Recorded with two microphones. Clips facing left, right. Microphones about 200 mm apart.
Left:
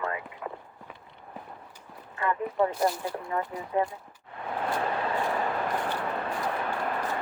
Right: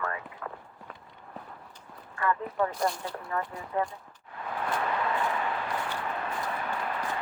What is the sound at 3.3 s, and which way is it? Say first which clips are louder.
Speech: left 2 dB; 20° left (ahead or behind).